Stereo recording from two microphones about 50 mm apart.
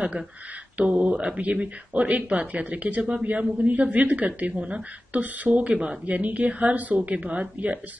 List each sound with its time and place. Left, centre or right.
0.7 s a man's voice: right